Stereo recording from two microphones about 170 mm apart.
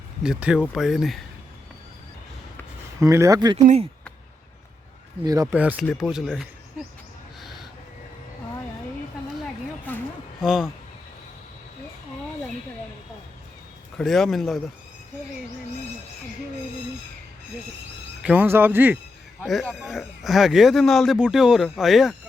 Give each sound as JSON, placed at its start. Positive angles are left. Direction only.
{"t": 0.2, "sound": "speech", "side_deg": -5}
{"t": 3.0, "sound": "speech", "side_deg": -20}
{"t": 5.2, "sound": "speech", "side_deg": -20}
{"t": 5.5, "sound": "speech", "side_deg": -5}
{"t": 7.4, "sound": "owl", "side_deg": 0}
{"t": 10.4, "sound": "speech", "side_deg": -5}
{"t": 14.0, "sound": "speech", "side_deg": 0}
{"t": 18.2, "sound": "speech", "side_deg": -10}
{"t": 19.4, "sound": "speech", "side_deg": 0}